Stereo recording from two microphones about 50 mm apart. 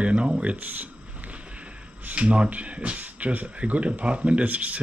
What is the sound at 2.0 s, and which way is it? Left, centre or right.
Speech, right.